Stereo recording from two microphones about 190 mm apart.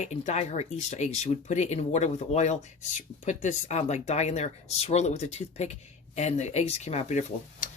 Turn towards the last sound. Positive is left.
turn(degrees=40)  # may be behind; listen again after turning